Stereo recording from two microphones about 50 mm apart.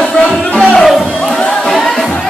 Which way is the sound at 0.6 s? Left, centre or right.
Centre.